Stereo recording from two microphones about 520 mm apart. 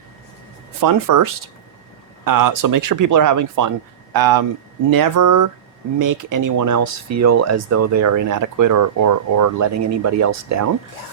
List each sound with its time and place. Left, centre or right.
0.8 s speech: right